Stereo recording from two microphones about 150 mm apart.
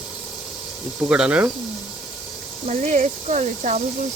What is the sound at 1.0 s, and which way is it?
Speech, 5° right (ahead or behind).